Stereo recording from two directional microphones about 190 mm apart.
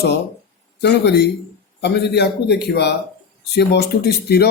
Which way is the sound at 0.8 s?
60° left (ahead or behind).